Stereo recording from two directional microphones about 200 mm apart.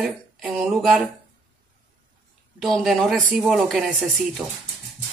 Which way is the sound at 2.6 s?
Centre (ahead or behind).